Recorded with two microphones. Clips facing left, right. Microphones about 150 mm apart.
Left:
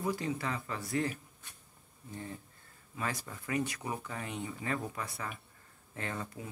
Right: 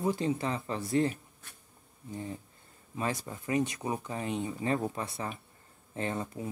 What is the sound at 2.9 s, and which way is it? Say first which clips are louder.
Speech: right 4 dB; 25° right (ahead or behind).